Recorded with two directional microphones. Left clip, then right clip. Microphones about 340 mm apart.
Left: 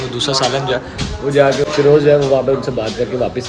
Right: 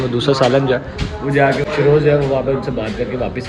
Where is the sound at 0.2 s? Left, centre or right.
Centre.